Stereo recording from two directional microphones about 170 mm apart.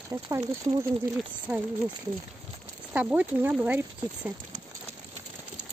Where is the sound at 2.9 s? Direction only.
10° right (ahead or behind).